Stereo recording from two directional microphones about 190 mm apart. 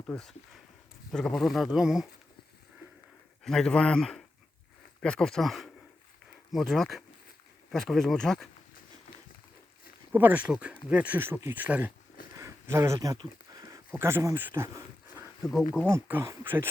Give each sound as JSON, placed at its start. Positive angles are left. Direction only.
{"t": 0.1, "sound": "speech", "side_deg": 5}
{"t": 3.4, "sound": "speech", "side_deg": 5}
{"t": 10.1, "sound": "speech", "side_deg": -10}
{"t": 15.9, "sound": "speech", "side_deg": -10}